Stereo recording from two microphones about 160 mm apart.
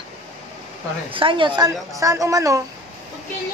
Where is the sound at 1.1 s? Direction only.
35° right (ahead or behind).